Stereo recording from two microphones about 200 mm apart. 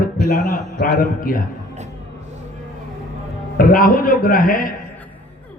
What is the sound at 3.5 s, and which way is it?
A man's voice, 45° left (ahead or behind).